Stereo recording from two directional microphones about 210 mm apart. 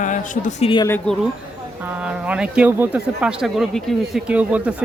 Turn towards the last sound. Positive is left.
turn(degrees=-5)  # may be behind; listen again after turning